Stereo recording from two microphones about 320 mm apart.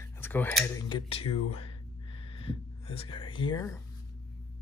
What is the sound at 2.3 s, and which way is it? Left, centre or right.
Speech, centre.